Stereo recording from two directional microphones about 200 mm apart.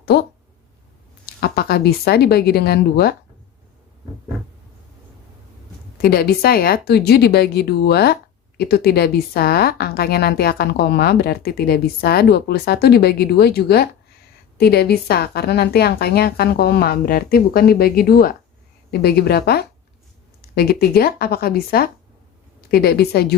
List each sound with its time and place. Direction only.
0.0 s speech: 50° left (ahead or behind)
1.4 s speech: 50° left (ahead or behind)
6.0 s speech: 50° left (ahead or behind)